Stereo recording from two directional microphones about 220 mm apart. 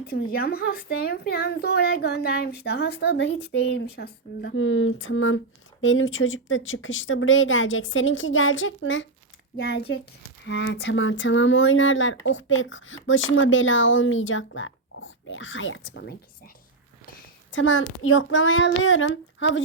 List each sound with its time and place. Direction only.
0.1 s speech: 45° left (ahead or behind)
4.5 s speech: 65° left (ahead or behind)
9.6 s speech: 45° left (ahead or behind)
17.5 s speech: 60° left (ahead or behind)